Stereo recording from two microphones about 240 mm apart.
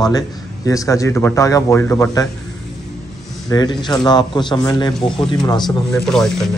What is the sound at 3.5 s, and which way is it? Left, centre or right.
A man's voice, centre.